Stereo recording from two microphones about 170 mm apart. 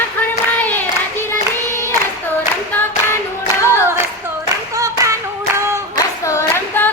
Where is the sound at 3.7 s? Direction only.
15° right (ahead or behind).